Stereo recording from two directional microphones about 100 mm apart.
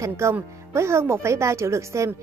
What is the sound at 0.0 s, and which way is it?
A woman's voice, 30° right (ahead or behind).